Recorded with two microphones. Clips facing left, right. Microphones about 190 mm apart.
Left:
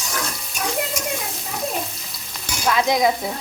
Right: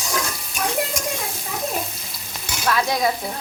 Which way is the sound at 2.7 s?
20° left (ahead or behind).